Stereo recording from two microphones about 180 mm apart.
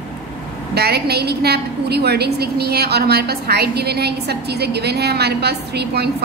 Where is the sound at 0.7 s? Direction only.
65° right (ahead or behind).